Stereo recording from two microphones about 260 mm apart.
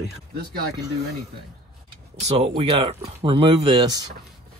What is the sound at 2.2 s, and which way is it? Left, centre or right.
Speech, right.